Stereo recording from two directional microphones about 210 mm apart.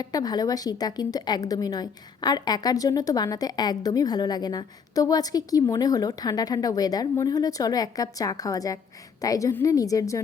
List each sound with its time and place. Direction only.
0.0 s a woman's voice: 20° left (ahead or behind)